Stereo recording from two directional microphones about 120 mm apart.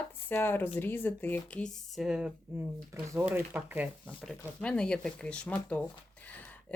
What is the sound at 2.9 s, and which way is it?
Speech, 25° right (ahead or behind).